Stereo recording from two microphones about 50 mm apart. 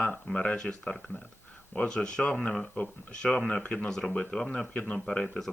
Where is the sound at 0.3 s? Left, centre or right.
Centre.